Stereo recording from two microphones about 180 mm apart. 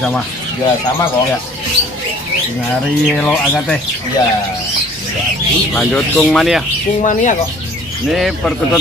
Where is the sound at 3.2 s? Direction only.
5° left (ahead or behind).